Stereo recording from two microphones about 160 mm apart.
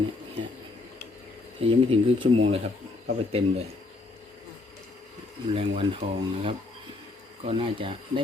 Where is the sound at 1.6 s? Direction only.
35° right (ahead or behind).